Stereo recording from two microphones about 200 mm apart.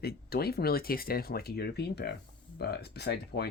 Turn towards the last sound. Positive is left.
turn(degrees=55)  # may be behind; listen again after turning